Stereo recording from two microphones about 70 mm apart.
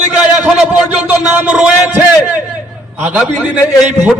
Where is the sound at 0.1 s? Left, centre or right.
Centre.